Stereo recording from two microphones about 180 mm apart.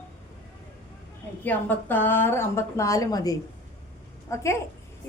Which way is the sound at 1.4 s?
10° left (ahead or behind).